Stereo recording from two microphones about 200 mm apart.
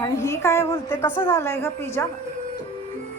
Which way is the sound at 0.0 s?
15° left (ahead or behind).